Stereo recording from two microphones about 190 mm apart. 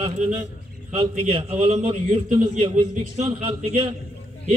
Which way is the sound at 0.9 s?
30° right (ahead or behind).